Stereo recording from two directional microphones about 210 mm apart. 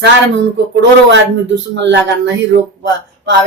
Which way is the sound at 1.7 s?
55° right (ahead or behind).